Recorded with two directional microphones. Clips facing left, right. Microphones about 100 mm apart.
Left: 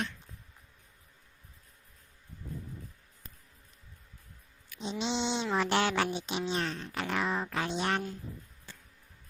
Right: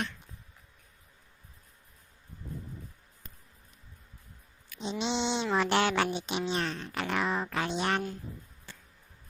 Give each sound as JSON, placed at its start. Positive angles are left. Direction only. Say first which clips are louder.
{"t": 4.8, "sound": "speech", "louder": "right 1 dB", "side_deg": -70}